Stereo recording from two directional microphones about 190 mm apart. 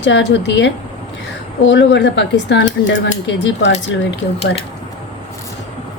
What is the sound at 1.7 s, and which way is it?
A woman's voice, 65° left (ahead or behind).